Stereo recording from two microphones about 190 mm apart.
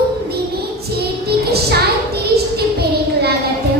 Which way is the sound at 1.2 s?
55° right (ahead or behind).